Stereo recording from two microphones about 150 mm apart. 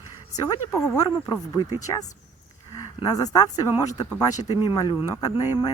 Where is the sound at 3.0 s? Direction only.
25° left (ahead or behind).